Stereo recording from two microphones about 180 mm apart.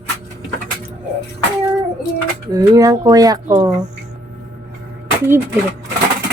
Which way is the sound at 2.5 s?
20° right (ahead or behind).